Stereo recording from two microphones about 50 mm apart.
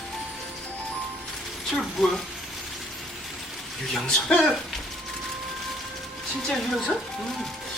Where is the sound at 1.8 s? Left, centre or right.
Centre.